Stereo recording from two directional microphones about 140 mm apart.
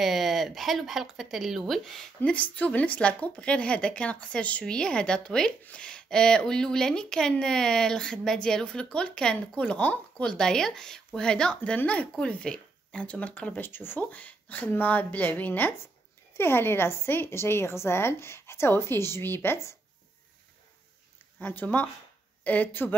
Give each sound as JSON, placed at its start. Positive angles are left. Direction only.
{"t": 0.0, "sound": "speech", "side_deg": 0}
{"t": 21.4, "sound": "speech", "side_deg": 15}